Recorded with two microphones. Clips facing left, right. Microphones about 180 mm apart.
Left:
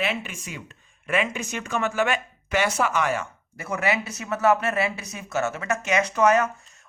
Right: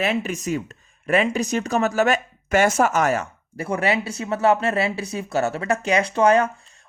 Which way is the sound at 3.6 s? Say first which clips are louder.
Right 4 dB; 30° right (ahead or behind).